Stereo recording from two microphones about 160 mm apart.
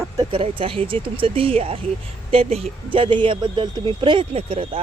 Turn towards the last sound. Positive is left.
turn(degrees=-40)  # may be behind; listen again after turning